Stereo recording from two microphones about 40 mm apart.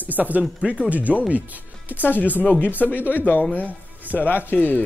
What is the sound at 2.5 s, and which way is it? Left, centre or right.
Speech, left.